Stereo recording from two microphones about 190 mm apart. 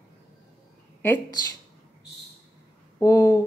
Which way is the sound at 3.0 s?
15° left (ahead or behind).